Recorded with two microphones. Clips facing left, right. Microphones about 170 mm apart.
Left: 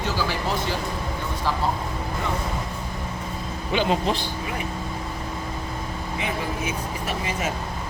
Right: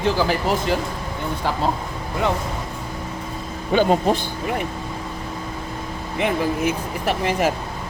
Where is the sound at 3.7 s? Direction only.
45° right (ahead or behind).